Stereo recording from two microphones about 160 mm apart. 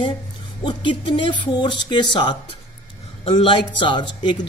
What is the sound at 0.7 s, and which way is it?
A man's voice, 30° left (ahead or behind).